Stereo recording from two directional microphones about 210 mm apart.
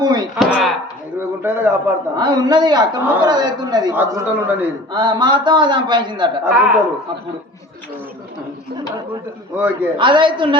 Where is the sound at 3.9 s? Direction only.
10° right (ahead or behind).